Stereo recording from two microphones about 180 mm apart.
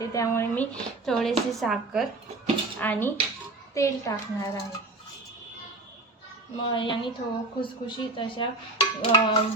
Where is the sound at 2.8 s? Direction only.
10° left (ahead or behind).